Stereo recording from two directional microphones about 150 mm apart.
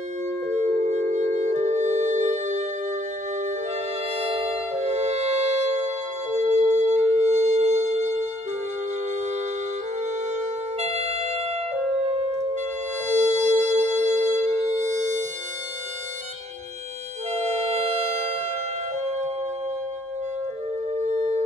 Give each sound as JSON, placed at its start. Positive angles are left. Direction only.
{"t": 0.5, "sound": "music", "side_deg": -50}
{"t": 4.1, "sound": "music", "side_deg": -45}
{"t": 10.3, "sound": "music", "side_deg": -50}
{"t": 17.3, "sound": "music", "side_deg": -45}
{"t": 20.9, "sound": "music", "side_deg": -50}